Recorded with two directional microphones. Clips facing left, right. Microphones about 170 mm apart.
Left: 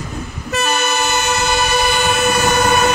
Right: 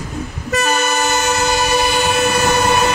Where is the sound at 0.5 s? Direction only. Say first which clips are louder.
Right 1 dB; 40° right (ahead or behind).